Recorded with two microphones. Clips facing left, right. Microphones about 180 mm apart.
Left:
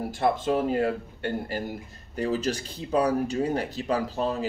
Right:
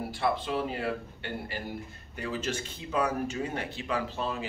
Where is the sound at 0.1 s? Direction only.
45° left (ahead or behind).